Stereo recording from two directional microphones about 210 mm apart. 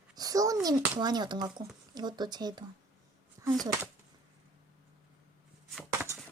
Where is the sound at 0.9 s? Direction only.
20° right (ahead or behind).